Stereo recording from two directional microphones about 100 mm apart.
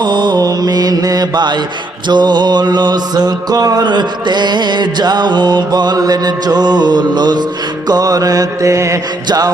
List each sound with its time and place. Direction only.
0.0 s mantra: 50° right (ahead or behind)
7.9 s music: 40° right (ahead or behind)